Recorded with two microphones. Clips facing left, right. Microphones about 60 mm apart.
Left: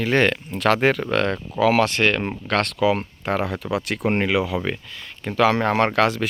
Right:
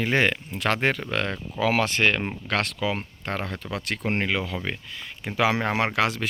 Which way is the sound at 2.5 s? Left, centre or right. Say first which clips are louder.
Left 4 dB; centre.